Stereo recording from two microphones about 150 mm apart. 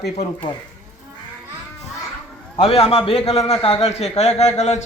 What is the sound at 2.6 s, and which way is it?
A man's voice, 40° left (ahead or behind).